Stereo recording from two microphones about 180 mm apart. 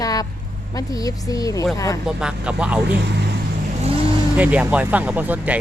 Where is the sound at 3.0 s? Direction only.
70° right (ahead or behind).